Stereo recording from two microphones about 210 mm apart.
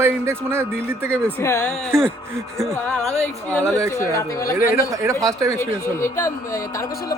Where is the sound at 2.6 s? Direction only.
5° left (ahead or behind).